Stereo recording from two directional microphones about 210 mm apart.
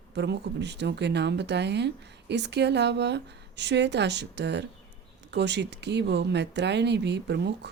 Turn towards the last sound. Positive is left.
turn(degrees=-55)  # may be behind; listen again after turning